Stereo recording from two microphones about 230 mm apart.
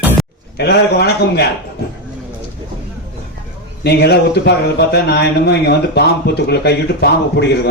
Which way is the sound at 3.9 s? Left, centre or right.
Left.